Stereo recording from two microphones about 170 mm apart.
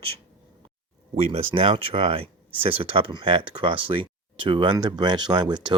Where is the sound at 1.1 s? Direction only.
35° right (ahead or behind).